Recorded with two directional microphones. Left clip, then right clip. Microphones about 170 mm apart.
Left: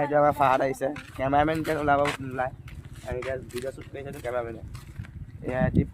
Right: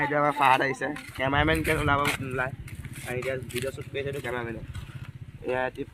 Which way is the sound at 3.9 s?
90° left.